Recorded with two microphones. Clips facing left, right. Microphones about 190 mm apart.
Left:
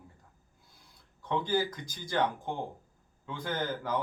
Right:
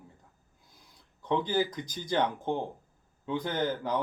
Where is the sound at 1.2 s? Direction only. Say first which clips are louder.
Right 2 dB; 20° right (ahead or behind).